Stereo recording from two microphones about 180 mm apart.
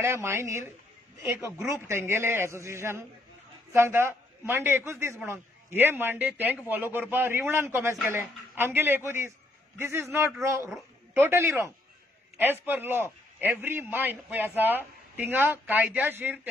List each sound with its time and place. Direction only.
0.0 s a man's voice: 15° right (ahead or behind)